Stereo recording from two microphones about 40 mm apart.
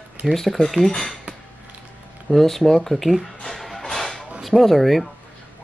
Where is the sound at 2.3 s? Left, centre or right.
Centre.